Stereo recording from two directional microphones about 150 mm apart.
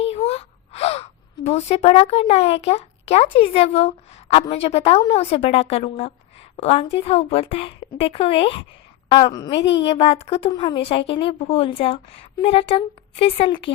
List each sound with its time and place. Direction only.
0.0 s gasp: 40° left (ahead or behind)
1.5 s a woman's voice: 45° left (ahead or behind); by 9.5 s 30° left (ahead or behind)
9.6 s speech: 40° left (ahead or behind)